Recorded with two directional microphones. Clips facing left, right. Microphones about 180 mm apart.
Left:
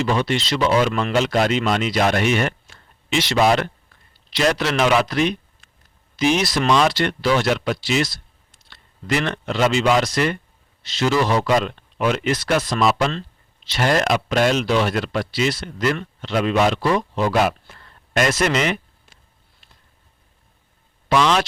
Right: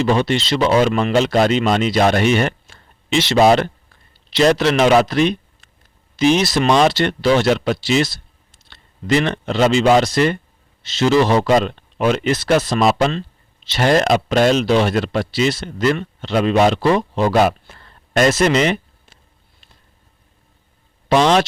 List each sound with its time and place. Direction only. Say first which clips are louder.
0.0 s a man's voice: right 4 dB; 30° right (ahead or behind)
17.2 s a sound: right 5 dB; 30° right (ahead or behind)
21.1 s speech: right 4 dB; 35° right (ahead or behind)